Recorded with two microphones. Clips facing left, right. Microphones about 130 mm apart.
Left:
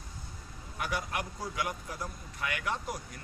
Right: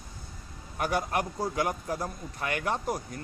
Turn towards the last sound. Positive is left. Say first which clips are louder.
# right 6 dB
turn(degrees=-40)  # may be behind; listen again after turning